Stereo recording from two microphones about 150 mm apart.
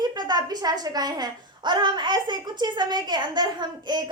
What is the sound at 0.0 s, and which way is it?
A woman's voice, 30° right (ahead or behind).